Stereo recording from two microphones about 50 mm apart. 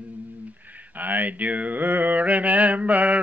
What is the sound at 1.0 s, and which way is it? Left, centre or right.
Mantra, right.